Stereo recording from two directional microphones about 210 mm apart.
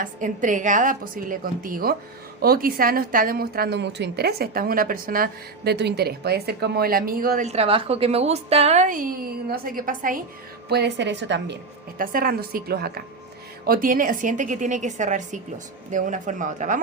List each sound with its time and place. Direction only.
0.0 s a woman's voice: 35° right (ahead or behind)
10.7 s a woman's voice: 50° right (ahead or behind); by 16.8 s 35° right (ahead or behind)